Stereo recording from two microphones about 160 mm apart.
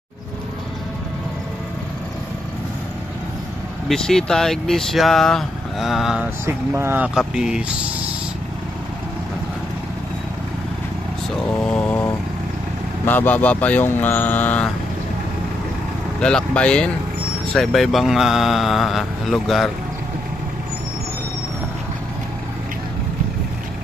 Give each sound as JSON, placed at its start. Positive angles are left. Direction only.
{"t": 3.9, "sound": "speech", "side_deg": 5}
{"t": 6.4, "sound": "speech", "side_deg": -15}
{"t": 11.7, "sound": "vehicle", "side_deg": 10}
{"t": 13.0, "sound": "speech", "side_deg": 10}
{"t": 16.2, "sound": "speech", "side_deg": 5}